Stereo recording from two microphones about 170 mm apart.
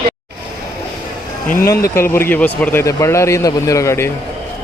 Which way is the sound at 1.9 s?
15° left (ahead or behind).